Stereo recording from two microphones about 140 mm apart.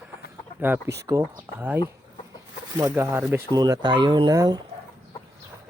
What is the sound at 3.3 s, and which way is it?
Speech, 25° right (ahead or behind).